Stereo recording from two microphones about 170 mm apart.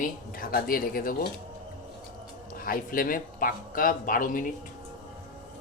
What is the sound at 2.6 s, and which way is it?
Speech, 55° left (ahead or behind).